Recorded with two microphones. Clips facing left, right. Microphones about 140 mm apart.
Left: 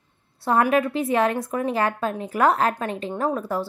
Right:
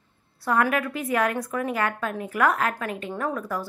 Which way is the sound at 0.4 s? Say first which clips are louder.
Left 4 dB; 25° left (ahead or behind).